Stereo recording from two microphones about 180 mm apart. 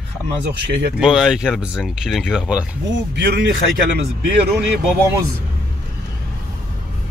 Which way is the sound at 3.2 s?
70° right (ahead or behind).